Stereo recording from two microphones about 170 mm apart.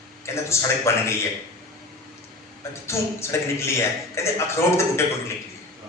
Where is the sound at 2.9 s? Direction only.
15° left (ahead or behind).